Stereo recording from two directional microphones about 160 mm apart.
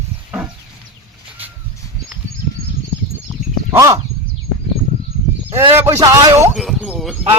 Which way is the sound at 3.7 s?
20° right (ahead or behind).